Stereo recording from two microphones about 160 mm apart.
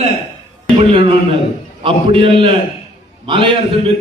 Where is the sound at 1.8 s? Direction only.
35° right (ahead or behind).